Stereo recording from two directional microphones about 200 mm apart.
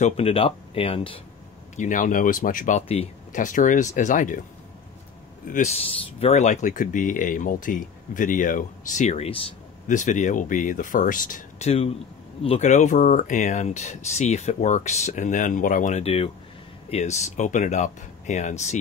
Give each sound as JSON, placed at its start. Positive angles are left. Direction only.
{"t": 0.0, "sound": "speech", "side_deg": 30}
{"t": 1.8, "sound": "speech", "side_deg": 40}
{"t": 5.5, "sound": "speech", "side_deg": 35}